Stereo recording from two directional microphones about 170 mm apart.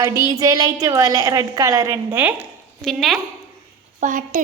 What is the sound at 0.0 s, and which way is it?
A woman's voice, 20° right (ahead or behind).